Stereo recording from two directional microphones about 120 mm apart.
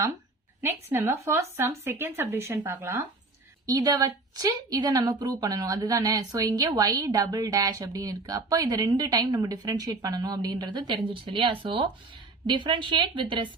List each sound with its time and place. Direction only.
0.6 s speech: 20° right (ahead or behind)
3.7 s a woman's voice: 30° right (ahead or behind)